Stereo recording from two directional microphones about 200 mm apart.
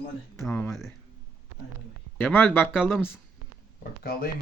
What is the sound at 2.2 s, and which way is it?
Speech, 10° left (ahead or behind).